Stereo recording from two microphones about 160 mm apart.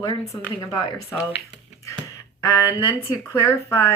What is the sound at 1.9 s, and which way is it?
Speech, 20° left (ahead or behind).